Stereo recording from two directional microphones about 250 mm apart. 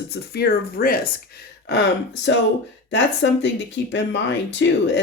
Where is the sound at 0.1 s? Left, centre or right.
Left.